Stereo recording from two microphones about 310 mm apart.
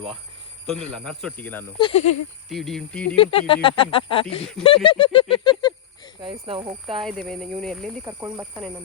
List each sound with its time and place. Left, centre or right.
0.9 s speech: centre
1.9 s speech: left
2.5 s speech: centre
3.2 s speech: centre
6.2 s speech: centre
7.0 s speech: centre
8.0 s speech: centre